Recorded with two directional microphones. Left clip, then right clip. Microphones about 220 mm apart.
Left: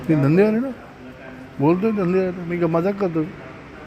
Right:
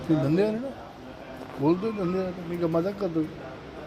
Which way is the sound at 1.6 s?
45° left (ahead or behind).